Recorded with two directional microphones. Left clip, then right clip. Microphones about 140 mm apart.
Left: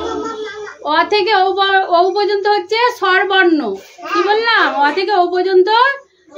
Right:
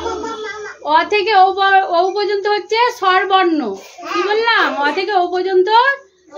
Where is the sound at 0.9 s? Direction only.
30° left (ahead or behind).